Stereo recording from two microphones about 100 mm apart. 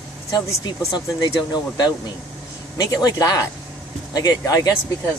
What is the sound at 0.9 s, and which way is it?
Speech, 40° left (ahead or behind).